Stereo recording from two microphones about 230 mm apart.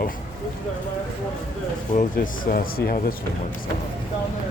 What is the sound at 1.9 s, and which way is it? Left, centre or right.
Speech, left.